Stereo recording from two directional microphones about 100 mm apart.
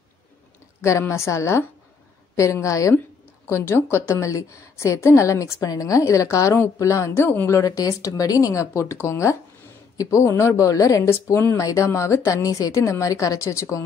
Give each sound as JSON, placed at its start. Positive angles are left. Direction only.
{"t": 0.8, "sound": "a woman's voice", "side_deg": 30}